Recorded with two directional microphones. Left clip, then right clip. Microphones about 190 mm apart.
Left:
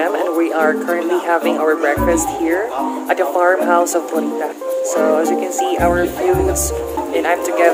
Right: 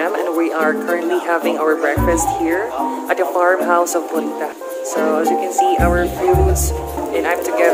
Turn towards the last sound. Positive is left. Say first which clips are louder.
# left 1 dB
turn(degrees=10)  # may be behind; listen again after turning